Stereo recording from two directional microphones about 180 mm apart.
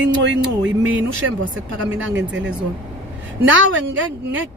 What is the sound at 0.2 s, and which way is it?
Speech, 90° right.